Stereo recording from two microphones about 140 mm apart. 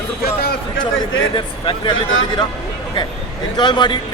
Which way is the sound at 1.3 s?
35° left (ahead or behind).